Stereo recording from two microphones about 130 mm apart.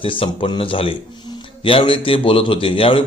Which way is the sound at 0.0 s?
40° left (ahead or behind).